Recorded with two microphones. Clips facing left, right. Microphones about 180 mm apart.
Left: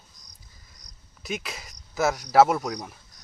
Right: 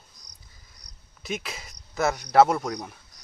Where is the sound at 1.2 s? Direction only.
Centre (ahead or behind).